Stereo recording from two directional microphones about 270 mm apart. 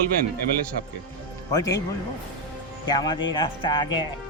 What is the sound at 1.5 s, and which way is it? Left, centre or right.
Speech, centre.